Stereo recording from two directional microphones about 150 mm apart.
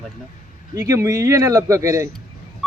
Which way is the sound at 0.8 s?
20° right (ahead or behind).